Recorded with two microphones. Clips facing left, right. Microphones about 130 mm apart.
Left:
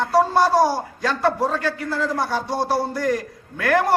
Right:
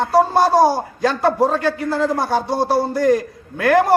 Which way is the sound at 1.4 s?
50° right (ahead or behind).